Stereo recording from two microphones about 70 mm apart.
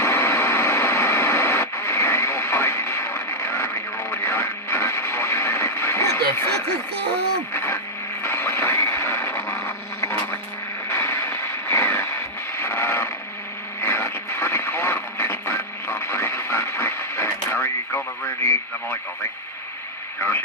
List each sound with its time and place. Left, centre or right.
0.0 s radio: left
7.5 s a sound: left
10.8 s radio: left